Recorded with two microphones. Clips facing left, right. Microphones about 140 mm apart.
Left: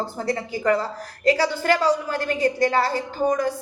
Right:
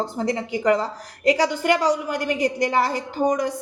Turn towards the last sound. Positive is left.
turn(degrees=-15)  # may be behind; listen again after turning